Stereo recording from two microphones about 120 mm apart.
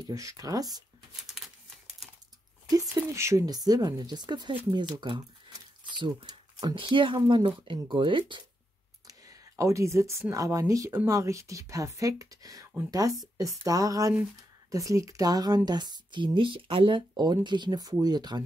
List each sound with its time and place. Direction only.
0.0 s a woman's voice: 25° right (ahead or behind)
1.4 s typewriter: centre (ahead or behind)
2.7 s a woman's voice: 25° right (ahead or behind); by 8.5 s 40° right (ahead or behind)
9.0 s a sound: 30° right (ahead or behind)
10.3 s a woman's voice: 25° right (ahead or behind)